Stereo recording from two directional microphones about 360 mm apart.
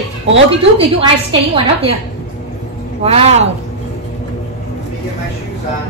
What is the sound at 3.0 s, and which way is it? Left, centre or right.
Speech, centre.